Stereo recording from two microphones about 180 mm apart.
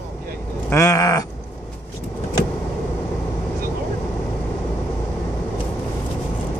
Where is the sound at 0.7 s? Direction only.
20° left (ahead or behind).